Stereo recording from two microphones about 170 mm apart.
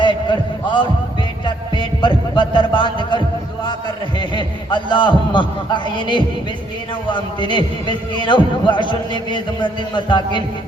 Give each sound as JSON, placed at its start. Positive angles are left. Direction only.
{"t": 0.0, "sound": "a sound", "side_deg": 30}
{"t": 1.5, "sound": "music", "side_deg": 30}
{"t": 4.2, "sound": "a man's voice", "side_deg": 25}